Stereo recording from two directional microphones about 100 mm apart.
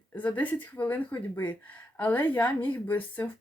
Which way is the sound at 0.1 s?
15° left (ahead or behind).